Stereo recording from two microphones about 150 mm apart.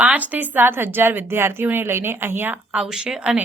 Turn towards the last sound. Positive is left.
turn(degrees=-5)  # may be behind; listen again after turning